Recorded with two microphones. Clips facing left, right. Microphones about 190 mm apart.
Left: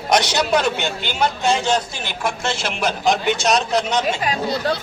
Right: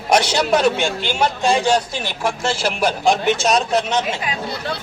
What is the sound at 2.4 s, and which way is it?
Speech, 35° right (ahead or behind).